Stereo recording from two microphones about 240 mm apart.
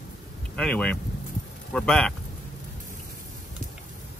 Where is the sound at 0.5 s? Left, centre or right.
Centre.